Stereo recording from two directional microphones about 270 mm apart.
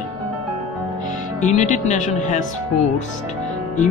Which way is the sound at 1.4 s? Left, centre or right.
Left.